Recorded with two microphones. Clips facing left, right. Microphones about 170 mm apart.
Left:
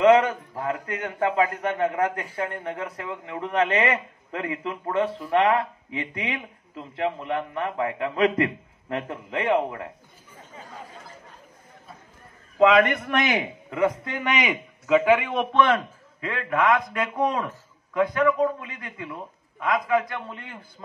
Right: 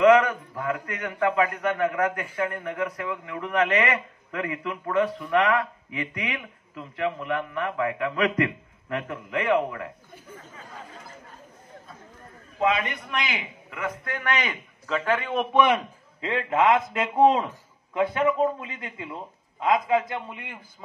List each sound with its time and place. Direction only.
0.0 s a man's voice: 30° left (ahead or behind)
12.5 s a man's voice: 80° left; by 13.5 s 45° left (ahead or behind)
13.7 s a man's voice: 25° left (ahead or behind); by 15.2 s 10° left (ahead or behind)
16.2 s a man's voice: 25° right (ahead or behind)
20.2 s a man's voice: 10° right (ahead or behind)